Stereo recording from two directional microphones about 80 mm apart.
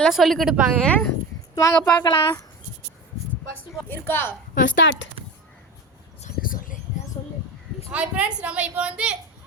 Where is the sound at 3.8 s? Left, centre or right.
Left.